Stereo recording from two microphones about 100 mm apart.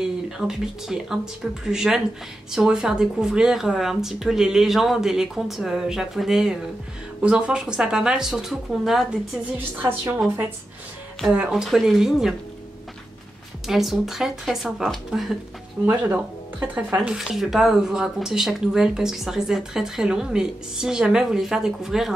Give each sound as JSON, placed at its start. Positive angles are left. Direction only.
{"t": 0.0, "sound": "speech", "side_deg": -5}
{"t": 9.8, "sound": "a woman's voice", "side_deg": -20}
{"t": 11.2, "sound": "speech", "side_deg": -10}
{"t": 13.7, "sound": "speech", "side_deg": -5}
{"t": 15.8, "sound": "speech", "side_deg": -15}